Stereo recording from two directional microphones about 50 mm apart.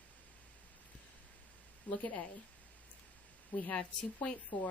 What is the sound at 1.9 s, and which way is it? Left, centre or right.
Speech, left.